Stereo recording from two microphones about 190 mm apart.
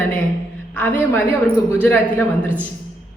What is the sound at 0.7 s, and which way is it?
A man's voice, 10° left (ahead or behind).